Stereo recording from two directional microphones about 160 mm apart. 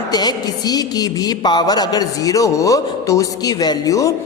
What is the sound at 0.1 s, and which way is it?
A woman's voice, 25° left (ahead or behind).